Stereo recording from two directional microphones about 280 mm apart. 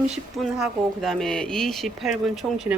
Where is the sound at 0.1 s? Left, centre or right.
Centre.